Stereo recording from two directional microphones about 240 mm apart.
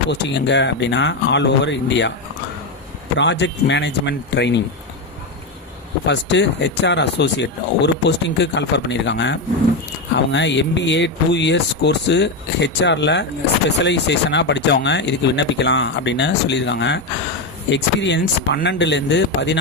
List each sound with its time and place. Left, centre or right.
0.1 s speech: left
3.2 s speech: left
6.1 s speech: left